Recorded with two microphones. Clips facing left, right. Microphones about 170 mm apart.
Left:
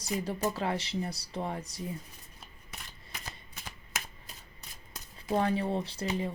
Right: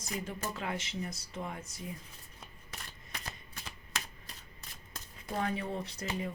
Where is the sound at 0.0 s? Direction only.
35° left (ahead or behind).